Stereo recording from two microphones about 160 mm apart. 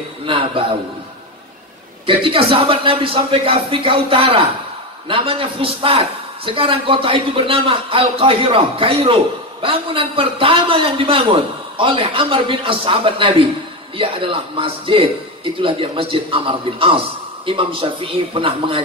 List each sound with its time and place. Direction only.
0.2 s a man's voice: 35° right (ahead or behind)
2.0 s a man's voice: 35° right (ahead or behind)